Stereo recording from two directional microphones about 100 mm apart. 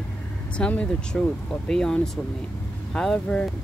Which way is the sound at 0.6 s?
10° left (ahead or behind).